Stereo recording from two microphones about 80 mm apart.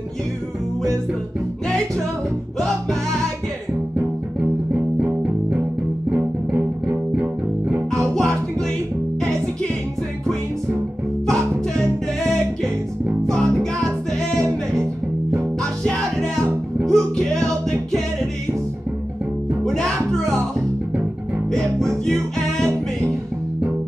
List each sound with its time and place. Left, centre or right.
5.0 s music: centre
8.1 s music: centre
11.2 s music: centre
13.3 s music: centre
15.3 s music: centre
19.6 s music: centre
21.5 s music: centre